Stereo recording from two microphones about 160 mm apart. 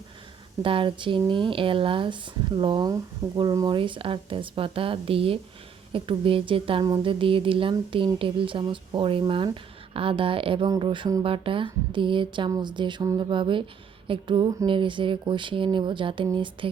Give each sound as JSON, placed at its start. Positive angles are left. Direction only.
{"t": 0.6, "sound": "speech", "side_deg": -35}
{"t": 6.8, "sound": "a sound", "side_deg": -20}
{"t": 7.1, "sound": "speech", "side_deg": -35}